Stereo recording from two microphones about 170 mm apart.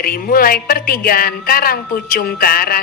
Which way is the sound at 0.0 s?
60° left (ahead or behind).